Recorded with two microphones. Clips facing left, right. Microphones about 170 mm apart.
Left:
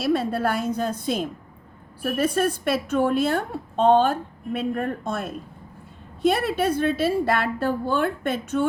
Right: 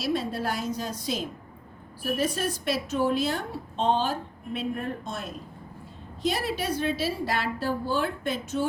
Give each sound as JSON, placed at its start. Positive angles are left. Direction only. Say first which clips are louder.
{"t": 0.0, "sound": "a woman's voice", "louder": "left 6 dB", "side_deg": 55}